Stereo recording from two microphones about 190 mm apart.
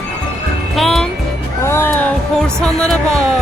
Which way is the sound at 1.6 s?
15° left (ahead or behind).